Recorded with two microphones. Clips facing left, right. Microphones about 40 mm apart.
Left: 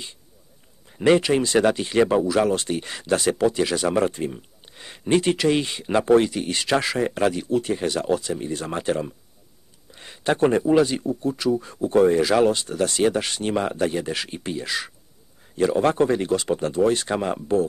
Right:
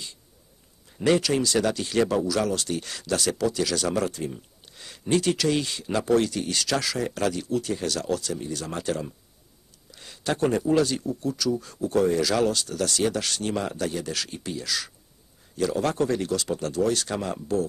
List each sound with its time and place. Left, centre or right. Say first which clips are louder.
0.9 s speech: left 4 dB; left